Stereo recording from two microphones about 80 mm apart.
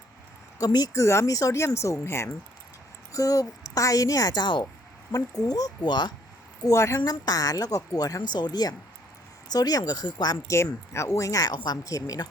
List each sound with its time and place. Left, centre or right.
0.6 s speech: left
0.9 s speech: left
5.4 s speech: left
5.8 s speech: left
6.7 s speech: left
7.0 s speech: left
10.9 s speech: left